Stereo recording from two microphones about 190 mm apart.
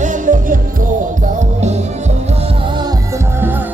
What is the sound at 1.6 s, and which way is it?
Music, 35° right (ahead or behind).